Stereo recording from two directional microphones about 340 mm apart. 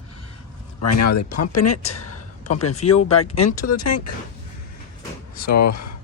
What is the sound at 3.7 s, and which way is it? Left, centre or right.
Speech, left.